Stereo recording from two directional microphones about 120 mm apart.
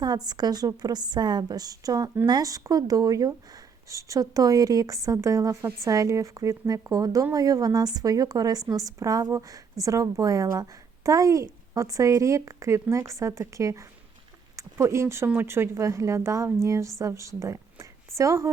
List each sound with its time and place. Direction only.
0.3 s a woman's voice: 35° right (ahead or behind)